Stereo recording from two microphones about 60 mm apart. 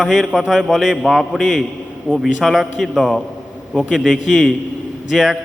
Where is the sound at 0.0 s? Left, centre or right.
Centre.